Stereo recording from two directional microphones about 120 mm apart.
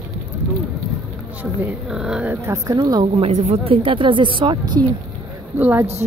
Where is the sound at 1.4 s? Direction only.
15° right (ahead or behind).